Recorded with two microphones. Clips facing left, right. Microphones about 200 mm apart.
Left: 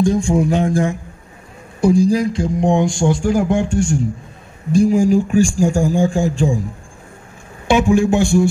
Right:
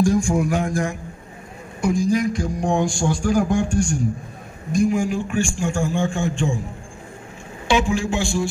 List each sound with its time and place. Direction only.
0.0 s a sound: 25° left (ahead or behind)
4.7 s a man's voice: 35° left (ahead or behind)
7.7 s speech: 55° left (ahead or behind)